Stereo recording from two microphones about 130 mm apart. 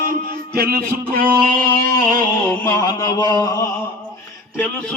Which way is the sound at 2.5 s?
25° left (ahead or behind).